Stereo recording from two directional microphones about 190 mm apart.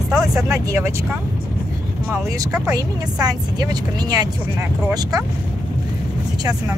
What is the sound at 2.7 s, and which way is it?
A woman's voice, 20° right (ahead or behind).